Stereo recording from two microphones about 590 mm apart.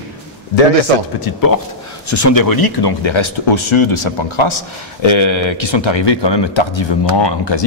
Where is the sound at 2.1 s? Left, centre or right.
Left.